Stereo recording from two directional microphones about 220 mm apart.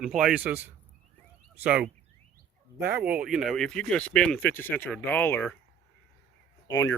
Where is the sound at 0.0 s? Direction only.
5° right (ahead or behind).